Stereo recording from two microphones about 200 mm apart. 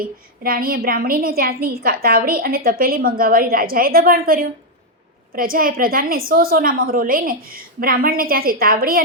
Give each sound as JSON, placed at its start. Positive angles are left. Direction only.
{"t": 0.0, "sound": "a woman's voice", "side_deg": -45}